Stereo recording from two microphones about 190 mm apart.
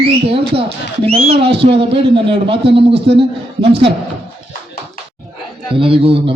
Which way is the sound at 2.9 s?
65° right (ahead or behind).